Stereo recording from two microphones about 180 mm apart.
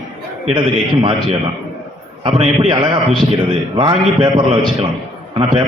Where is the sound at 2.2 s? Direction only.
35° right (ahead or behind).